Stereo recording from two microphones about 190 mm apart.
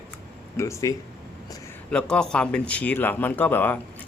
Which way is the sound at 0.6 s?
15° left (ahead or behind).